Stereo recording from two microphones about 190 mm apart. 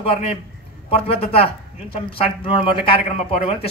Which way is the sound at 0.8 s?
30° left (ahead or behind).